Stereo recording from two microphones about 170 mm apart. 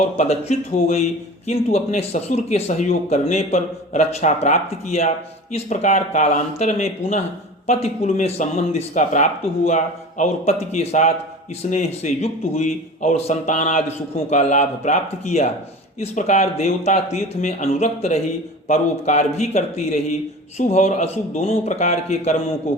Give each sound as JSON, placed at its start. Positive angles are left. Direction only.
{"t": 0.0, "sound": "speech", "side_deg": 40}